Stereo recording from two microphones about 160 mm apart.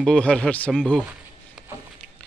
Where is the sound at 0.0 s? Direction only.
5° left (ahead or behind).